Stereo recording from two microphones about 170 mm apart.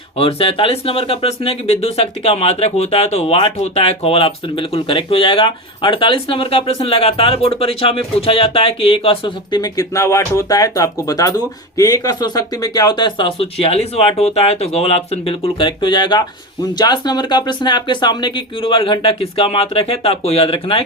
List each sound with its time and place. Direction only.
0.2 s speech: 35° left (ahead or behind)